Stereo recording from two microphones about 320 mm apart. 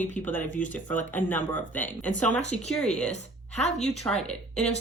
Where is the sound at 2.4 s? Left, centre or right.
Left.